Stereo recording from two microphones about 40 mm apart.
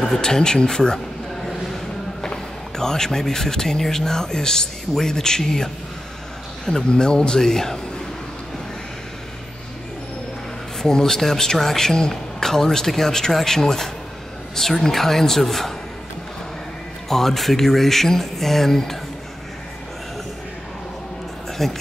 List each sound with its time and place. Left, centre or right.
0.2 s speech: centre
2.2 s speech: centre
10.8 s speech: centre
17.1 s speech: centre
21.6 s speech: centre